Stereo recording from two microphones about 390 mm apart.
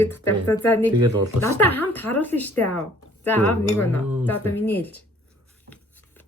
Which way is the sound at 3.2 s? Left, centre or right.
Centre.